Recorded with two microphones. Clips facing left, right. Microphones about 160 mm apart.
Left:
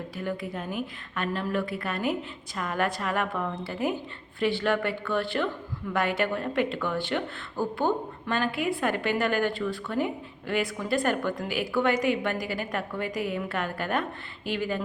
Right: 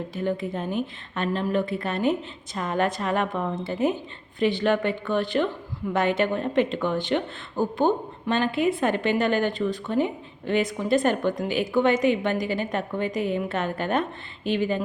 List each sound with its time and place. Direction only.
0.2 s speech: 25° right (ahead or behind)